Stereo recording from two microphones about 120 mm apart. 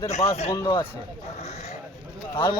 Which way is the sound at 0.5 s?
25° left (ahead or behind).